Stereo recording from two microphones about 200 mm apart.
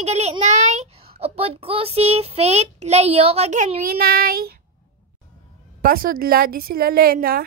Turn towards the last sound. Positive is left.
turn(degrees=-50)  # may be behind; listen again after turning